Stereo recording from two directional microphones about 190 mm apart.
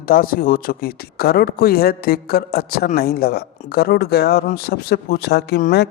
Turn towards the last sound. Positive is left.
turn(degrees=60)  # may be behind; listen again after turning